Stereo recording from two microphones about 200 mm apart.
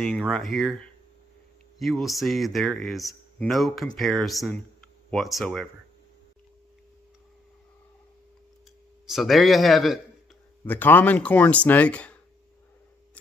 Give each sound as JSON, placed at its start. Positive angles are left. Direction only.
{"t": 0.0, "sound": "speech", "side_deg": 5}
{"t": 9.0, "sound": "speech", "side_deg": 0}